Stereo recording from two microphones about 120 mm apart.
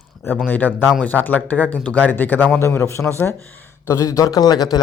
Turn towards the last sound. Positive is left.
turn(degrees=35)  # may be behind; listen again after turning